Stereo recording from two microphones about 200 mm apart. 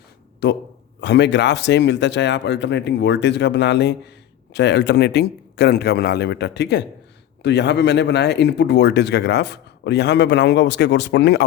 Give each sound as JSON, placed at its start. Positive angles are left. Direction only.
{"t": 0.4, "sound": "speech", "side_deg": 60}